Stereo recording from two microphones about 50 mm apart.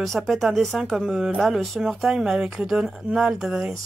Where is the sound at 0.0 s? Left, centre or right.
Centre.